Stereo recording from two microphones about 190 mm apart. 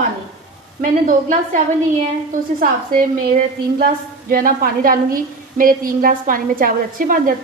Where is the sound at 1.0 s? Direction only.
45° right (ahead or behind).